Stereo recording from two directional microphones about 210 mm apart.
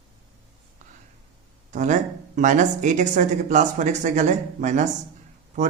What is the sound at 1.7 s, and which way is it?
Speech, 35° right (ahead or behind).